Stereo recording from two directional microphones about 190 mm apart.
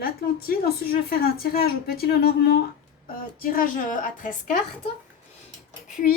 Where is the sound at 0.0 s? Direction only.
50° left (ahead or behind).